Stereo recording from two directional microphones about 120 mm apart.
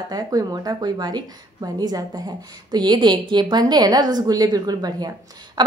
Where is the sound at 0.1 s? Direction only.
30° right (ahead or behind).